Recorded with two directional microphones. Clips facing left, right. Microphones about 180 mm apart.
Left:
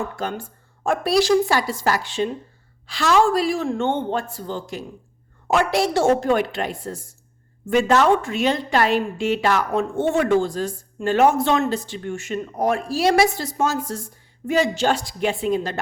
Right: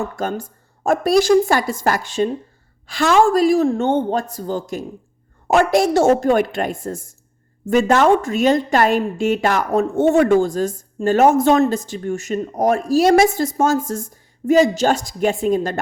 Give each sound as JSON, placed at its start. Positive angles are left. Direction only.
{"t": 0.2, "sound": "a woman's voice", "side_deg": -45}